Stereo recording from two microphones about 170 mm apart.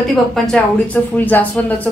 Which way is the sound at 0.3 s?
5° left (ahead or behind).